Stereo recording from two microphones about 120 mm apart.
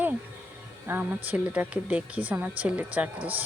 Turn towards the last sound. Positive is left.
turn(degrees=-15)  # may be behind; listen again after turning